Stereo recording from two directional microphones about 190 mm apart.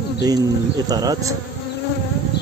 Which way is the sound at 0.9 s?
20° right (ahead or behind).